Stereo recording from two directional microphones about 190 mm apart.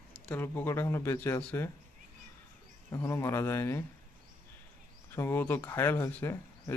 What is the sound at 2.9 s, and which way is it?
Speech, 15° left (ahead or behind).